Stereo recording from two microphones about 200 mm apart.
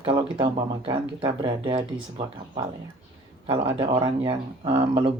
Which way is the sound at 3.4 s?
25° right (ahead or behind).